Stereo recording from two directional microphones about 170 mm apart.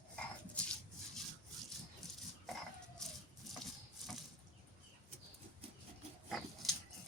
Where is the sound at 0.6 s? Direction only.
5° left (ahead or behind).